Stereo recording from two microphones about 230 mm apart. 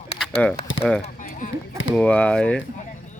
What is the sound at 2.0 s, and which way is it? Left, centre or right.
Speech, centre.